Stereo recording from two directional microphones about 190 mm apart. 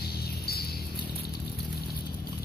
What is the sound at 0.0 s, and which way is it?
Music, 55° left (ahead or behind).